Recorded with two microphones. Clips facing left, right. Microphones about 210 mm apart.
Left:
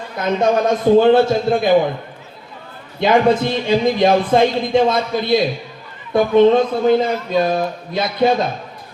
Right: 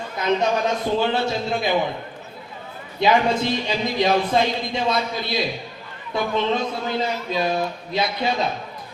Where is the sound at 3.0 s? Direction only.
50° left (ahead or behind).